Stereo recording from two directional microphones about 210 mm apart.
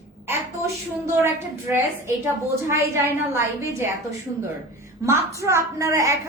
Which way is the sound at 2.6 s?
10° right (ahead or behind).